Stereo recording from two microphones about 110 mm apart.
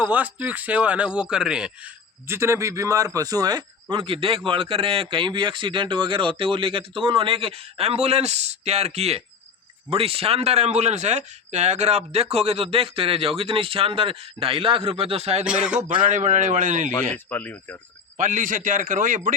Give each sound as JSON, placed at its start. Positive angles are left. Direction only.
{"t": 0.0, "sound": "speech", "side_deg": -15}
{"t": 2.2, "sound": "a man's voice", "side_deg": -25}
{"t": 9.9, "sound": "speech", "side_deg": -60}
{"t": 15.4, "sound": "speech", "side_deg": -10}
{"t": 16.0, "sound": "a man's voice", "side_deg": -90}
{"t": 17.2, "sound": "speech", "side_deg": 15}
{"t": 18.9, "sound": "a man's voice", "side_deg": -90}